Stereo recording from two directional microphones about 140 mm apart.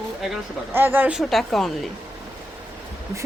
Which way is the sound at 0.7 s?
15° right (ahead or behind).